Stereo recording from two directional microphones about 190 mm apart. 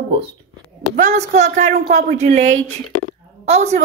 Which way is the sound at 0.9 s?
40° right (ahead or behind).